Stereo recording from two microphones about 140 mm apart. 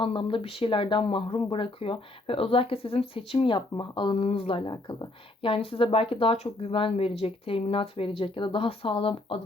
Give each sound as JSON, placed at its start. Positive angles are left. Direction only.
{"t": 0.0, "sound": "speech", "side_deg": 40}